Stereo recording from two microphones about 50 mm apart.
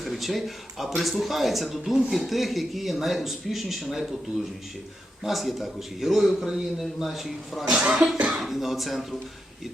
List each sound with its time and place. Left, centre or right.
0.0 s speech: centre
5.2 s speech: centre
7.7 s speech: right
8.4 s speech: centre